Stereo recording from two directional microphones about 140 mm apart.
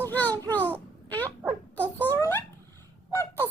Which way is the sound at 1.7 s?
10° left (ahead or behind).